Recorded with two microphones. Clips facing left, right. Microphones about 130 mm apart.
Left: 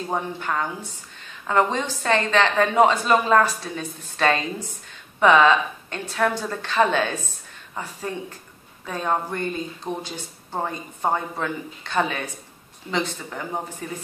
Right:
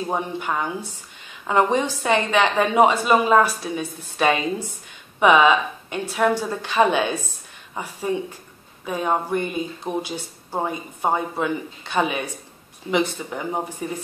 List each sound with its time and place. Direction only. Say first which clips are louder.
0.1 s speech: left 1 dB; 15° right (ahead or behind)